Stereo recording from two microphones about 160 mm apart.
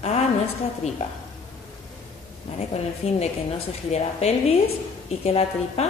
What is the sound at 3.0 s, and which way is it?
Mantra, 40° left (ahead or behind).